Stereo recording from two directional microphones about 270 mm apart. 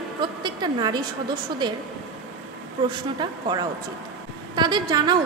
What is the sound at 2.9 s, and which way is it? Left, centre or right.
A woman's voice, centre.